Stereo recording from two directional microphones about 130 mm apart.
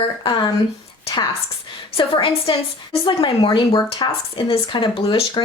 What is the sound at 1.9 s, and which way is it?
A woman's voice, 40° left (ahead or behind).